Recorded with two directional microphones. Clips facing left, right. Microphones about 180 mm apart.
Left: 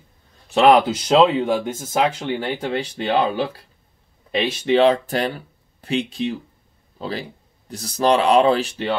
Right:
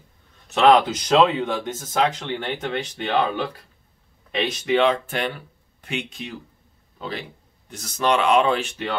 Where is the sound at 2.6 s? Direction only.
35° left (ahead or behind).